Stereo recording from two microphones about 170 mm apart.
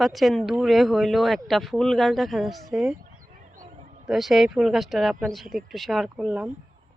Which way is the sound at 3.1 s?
50° right (ahead or behind).